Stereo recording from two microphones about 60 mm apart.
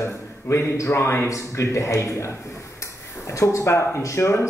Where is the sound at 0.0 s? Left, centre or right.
Left.